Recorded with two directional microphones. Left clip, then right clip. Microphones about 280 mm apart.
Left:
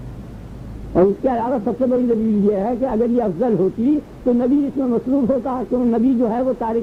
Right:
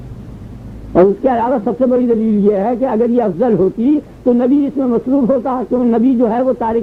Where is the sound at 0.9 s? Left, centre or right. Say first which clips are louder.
Right 5 dB; right.